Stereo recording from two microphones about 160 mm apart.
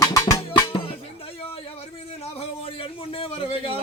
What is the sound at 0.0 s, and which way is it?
Music, 20° left (ahead or behind).